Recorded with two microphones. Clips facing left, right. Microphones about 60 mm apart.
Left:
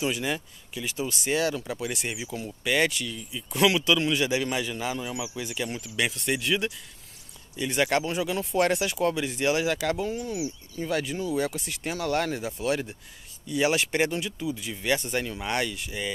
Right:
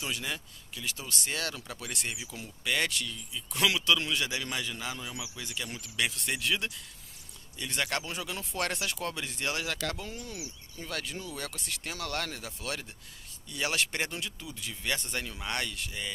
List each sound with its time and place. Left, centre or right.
0.0 s speech: centre
3.3 s speech: left
3.5 s speech: centre